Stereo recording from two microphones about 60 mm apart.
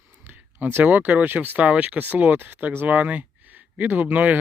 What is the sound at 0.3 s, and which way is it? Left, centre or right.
Speech, right.